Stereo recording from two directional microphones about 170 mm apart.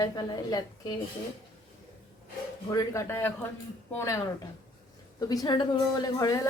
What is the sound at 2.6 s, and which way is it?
A woman's voice, 20° left (ahead or behind).